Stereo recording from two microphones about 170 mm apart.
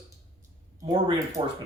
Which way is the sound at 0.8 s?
25° right (ahead or behind).